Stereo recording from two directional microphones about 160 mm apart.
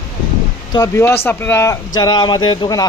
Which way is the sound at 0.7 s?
20° left (ahead or behind).